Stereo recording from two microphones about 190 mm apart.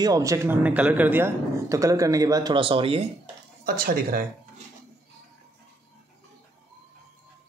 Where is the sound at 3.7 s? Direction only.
50° right (ahead or behind).